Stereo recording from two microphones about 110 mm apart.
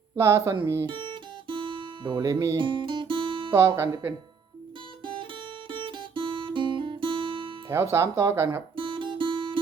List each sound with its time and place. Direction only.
0.2 s speech: 25° right (ahead or behind)
0.9 s guitar: 50° right (ahead or behind)
2.2 s speech: 30° right (ahead or behind)
2.6 s music: 50° right (ahead or behind)
3.8 s speech: 25° right (ahead or behind)
5.2 s music: 50° right (ahead or behind)
7.7 s speech: 25° right (ahead or behind)
8.7 s guitar: 50° right (ahead or behind)